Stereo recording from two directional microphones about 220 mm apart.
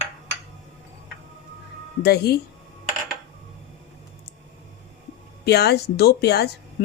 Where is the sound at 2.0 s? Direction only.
45° left (ahead or behind).